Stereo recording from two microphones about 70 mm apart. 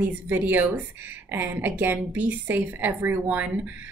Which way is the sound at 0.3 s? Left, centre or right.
Right.